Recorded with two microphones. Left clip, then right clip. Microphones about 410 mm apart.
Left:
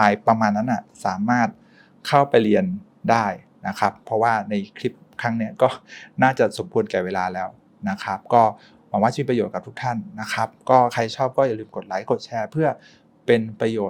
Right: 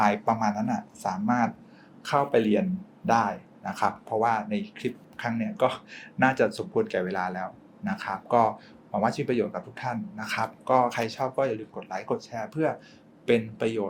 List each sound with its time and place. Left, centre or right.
0.0 s speech: left
3.1 s speech: left
13.2 s speech: left